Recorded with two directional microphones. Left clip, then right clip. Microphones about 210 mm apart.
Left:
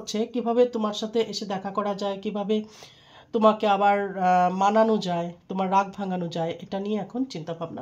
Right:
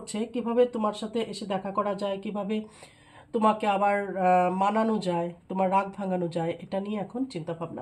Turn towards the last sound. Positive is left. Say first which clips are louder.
# left 2 dB
turn(degrees=35)  # may be behind; listen again after turning